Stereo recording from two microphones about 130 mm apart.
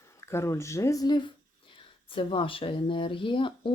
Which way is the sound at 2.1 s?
40° left (ahead or behind).